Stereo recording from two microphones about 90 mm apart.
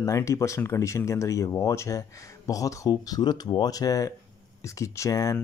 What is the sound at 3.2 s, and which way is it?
Speech, 55° left (ahead or behind).